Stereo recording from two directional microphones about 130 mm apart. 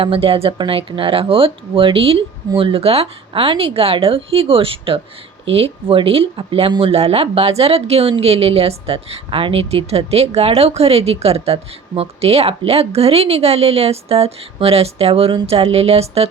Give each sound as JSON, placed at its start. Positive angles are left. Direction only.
{"t": 0.0, "sound": "speech", "side_deg": -45}